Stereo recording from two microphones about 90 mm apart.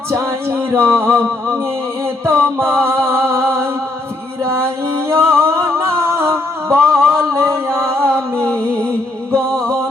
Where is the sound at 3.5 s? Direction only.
30° right (ahead or behind).